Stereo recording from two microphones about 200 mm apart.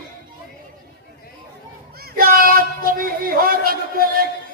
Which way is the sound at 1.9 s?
50° right (ahead or behind).